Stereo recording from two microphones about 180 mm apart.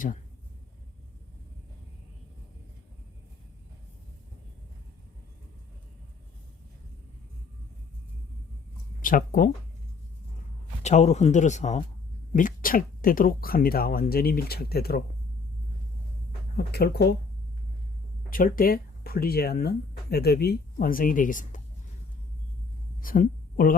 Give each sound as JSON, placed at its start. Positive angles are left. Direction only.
{"t": 9.0, "sound": "speech", "side_deg": 50}
{"t": 10.8, "sound": "speech", "side_deg": 40}
{"t": 16.6, "sound": "speech", "side_deg": 60}
{"t": 18.3, "sound": "speech", "side_deg": 50}
{"t": 23.0, "sound": "a sound", "side_deg": 50}